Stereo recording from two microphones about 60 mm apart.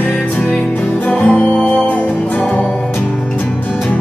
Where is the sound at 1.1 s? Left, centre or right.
Left.